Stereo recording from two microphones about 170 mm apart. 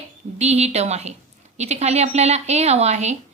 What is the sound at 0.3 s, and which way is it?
Speech, 40° right (ahead or behind).